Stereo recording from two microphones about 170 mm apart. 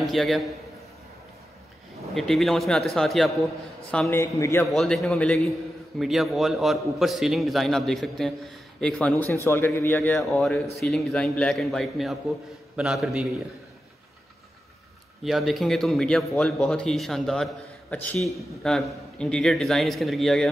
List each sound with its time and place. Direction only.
0.0 s a man's voice: centre (ahead or behind)
2.1 s a man's voice: centre (ahead or behind)
4.1 s a man's voice: 15° left (ahead or behind)
4.6 s a man's voice: centre (ahead or behind)
9.3 s a man's voice: 15° left (ahead or behind)
10.1 s a man's voice: centre (ahead or behind)
15.2 s a man's voice: centre (ahead or behind)